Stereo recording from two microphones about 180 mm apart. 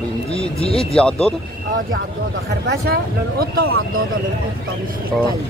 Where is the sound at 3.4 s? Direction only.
60° right (ahead or behind).